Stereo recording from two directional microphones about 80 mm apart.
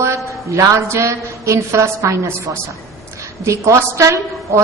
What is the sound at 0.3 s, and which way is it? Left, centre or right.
A woman's voice, right.